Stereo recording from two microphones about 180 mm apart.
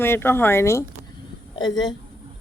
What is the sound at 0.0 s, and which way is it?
A woman's voice, 15° left (ahead or behind).